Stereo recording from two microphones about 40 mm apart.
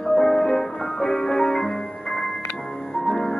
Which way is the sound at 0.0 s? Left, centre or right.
Centre.